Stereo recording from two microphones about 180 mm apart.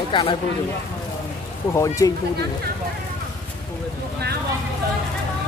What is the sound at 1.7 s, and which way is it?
Speech, 20° left (ahead or behind).